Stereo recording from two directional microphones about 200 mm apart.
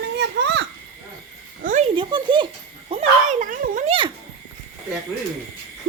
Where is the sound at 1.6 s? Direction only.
40° right (ahead or behind).